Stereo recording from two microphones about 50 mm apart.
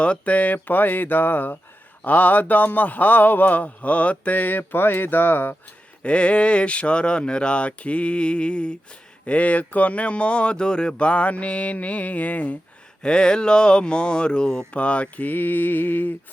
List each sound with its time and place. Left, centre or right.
0.0 s a man's voice: left
6.0 s speech: left
13.0 s a man's voice: centre; by 16.1 s left